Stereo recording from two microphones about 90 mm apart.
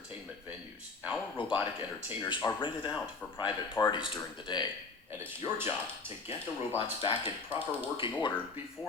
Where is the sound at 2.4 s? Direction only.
45° left (ahead or behind).